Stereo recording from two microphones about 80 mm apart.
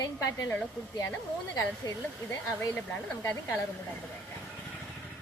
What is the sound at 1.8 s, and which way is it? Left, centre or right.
Speech, left.